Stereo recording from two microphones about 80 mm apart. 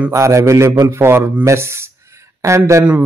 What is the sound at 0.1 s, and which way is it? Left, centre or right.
A man's voice, right.